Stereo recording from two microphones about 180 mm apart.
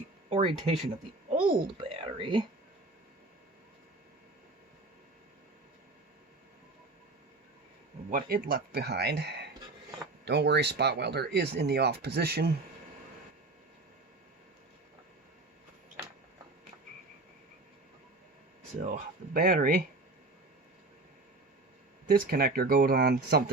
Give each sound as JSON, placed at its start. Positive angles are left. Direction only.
{"t": 0.3, "sound": "speech", "side_deg": -35}
{"t": 1.8, "sound": "speech", "side_deg": -30}
{"t": 8.1, "sound": "speech", "side_deg": -55}
{"t": 18.8, "sound": "speech", "side_deg": -45}
{"t": 22.0, "sound": "speech", "side_deg": -55}